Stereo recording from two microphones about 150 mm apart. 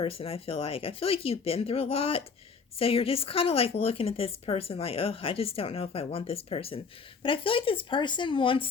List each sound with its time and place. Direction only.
0.0 s speech: 40° left (ahead or behind)